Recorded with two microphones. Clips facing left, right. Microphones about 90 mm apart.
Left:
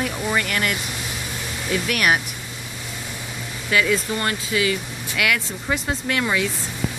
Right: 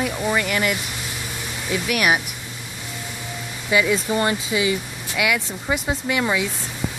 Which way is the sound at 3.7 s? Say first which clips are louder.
Right 2 dB; 15° right (ahead or behind).